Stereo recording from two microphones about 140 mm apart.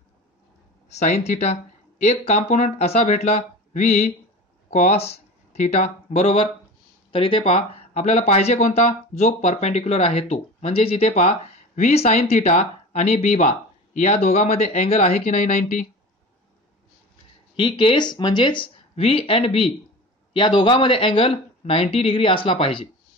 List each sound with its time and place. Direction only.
0.8 s speech: 55° left (ahead or behind)
15.3 s speech: 65° left (ahead or behind)
17.6 s speech: 35° left (ahead or behind)